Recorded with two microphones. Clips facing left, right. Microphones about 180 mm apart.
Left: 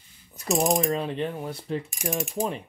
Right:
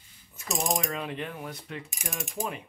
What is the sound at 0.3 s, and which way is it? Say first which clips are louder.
Mechanisms: left 7 dB; 35° left (ahead or behind).